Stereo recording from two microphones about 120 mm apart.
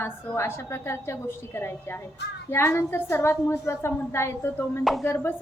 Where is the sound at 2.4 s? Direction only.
20° left (ahead or behind).